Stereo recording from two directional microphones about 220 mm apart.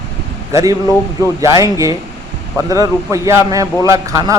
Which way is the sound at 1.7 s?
15° right (ahead or behind).